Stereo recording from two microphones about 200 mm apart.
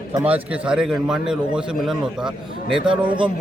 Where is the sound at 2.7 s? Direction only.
25° right (ahead or behind).